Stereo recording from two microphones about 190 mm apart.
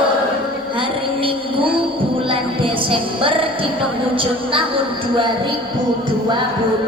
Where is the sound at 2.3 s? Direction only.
30° right (ahead or behind).